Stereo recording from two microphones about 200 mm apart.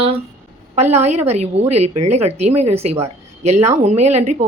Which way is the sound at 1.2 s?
35° right (ahead or behind).